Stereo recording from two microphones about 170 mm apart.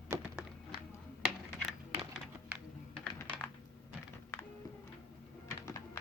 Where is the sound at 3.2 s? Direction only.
10° left (ahead or behind).